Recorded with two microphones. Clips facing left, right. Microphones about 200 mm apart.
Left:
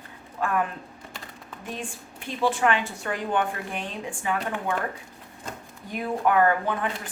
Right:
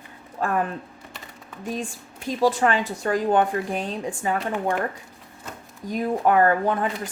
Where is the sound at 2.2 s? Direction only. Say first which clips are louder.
Right 3 dB; 40° right (ahead or behind).